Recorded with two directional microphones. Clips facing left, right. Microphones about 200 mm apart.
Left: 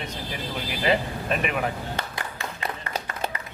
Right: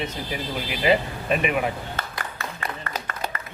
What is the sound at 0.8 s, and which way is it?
Music, 5° right (ahead or behind).